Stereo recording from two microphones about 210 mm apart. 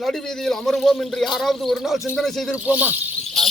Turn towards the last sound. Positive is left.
turn(degrees=-5)  # may be behind; listen again after turning